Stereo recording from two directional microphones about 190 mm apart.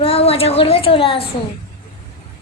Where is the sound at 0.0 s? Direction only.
30° left (ahead or behind).